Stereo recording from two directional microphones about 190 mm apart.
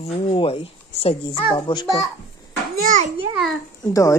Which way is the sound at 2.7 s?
45° right (ahead or behind).